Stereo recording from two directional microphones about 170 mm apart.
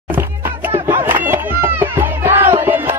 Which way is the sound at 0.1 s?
15° right (ahead or behind).